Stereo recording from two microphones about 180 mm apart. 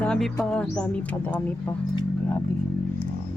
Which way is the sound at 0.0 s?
5° left (ahead or behind).